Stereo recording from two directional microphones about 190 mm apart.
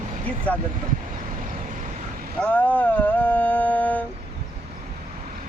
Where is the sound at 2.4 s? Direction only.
10° left (ahead or behind).